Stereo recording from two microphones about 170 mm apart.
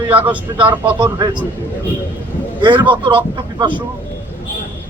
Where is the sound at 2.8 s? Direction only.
30° right (ahead or behind).